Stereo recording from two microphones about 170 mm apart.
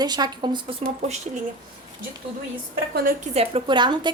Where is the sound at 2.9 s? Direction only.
55° right (ahead or behind).